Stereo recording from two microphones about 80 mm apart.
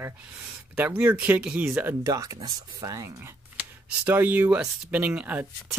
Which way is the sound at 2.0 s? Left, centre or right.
Right.